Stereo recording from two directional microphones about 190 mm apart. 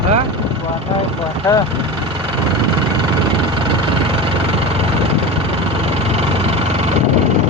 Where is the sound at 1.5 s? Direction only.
15° left (ahead or behind).